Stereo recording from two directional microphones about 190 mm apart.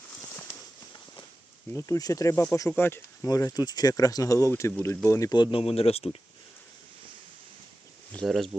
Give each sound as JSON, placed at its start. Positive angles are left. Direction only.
{"t": 1.7, "sound": "speech", "side_deg": 20}
{"t": 8.1, "sound": "speech", "side_deg": 0}